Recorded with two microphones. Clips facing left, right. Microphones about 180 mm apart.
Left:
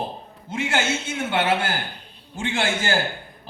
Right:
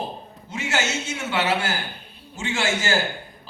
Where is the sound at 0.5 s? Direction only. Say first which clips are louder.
Left 2 dB; 55° left (ahead or behind).